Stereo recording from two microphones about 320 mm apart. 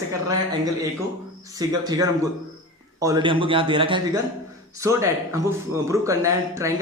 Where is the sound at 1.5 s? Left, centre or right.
Centre.